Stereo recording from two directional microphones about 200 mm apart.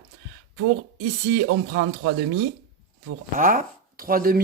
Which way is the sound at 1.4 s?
70° right (ahead or behind).